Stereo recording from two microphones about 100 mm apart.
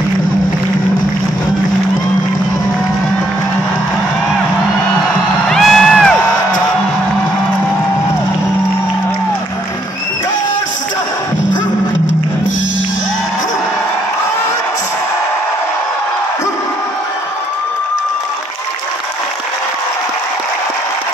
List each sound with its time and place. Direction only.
5.5 s crowd: 5° left (ahead or behind)